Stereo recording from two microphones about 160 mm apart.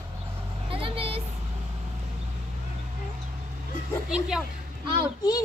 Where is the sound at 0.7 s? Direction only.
35° right (ahead or behind).